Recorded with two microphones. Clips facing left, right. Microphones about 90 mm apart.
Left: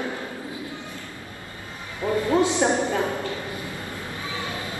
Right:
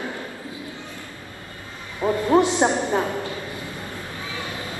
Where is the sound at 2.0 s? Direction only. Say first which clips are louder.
Right 2 dB; 20° right (ahead or behind).